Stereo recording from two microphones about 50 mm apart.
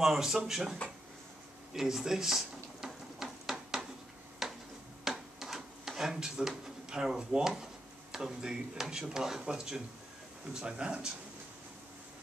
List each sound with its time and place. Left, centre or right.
0.0 s speech: centre
1.7 s a sound: centre
8.1 s speech: centre